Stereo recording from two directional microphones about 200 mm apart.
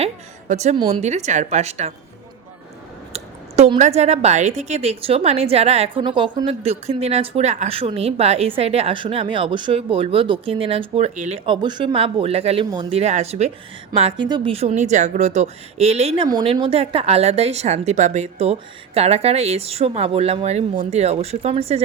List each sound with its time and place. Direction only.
0.0 s a sound: 35° right (ahead or behind)
0.8 s a woman's voice: 30° right (ahead or behind)
3.1 s a woman's voice: 30° right (ahead or behind)
11.4 s a woman's voice: 20° right (ahead or behind)